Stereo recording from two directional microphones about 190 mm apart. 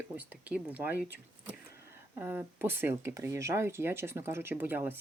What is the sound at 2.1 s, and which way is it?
Speech, 10° right (ahead or behind).